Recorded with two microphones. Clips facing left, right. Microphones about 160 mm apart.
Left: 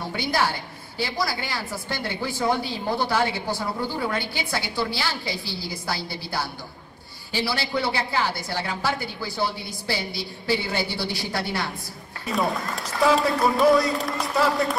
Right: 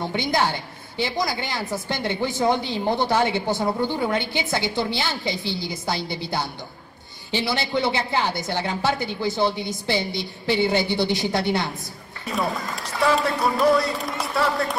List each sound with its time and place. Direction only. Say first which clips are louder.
0.1 s speech: even; 20° right (ahead or behind)
12.3 s a man's voice: left 1 dB; centre (ahead or behind)